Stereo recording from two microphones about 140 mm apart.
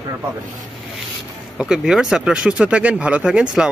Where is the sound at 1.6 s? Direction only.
5° right (ahead or behind).